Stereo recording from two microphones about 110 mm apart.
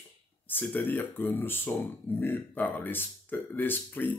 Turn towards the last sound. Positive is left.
turn(degrees=20)  # may be behind; listen again after turning